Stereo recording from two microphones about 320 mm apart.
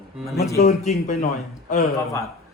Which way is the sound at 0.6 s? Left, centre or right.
Left.